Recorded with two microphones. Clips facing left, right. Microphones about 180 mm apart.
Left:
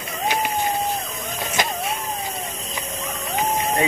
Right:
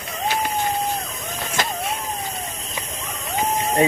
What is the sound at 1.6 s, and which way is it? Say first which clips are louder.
Printer: left 1 dB; 15° left (ahead or behind).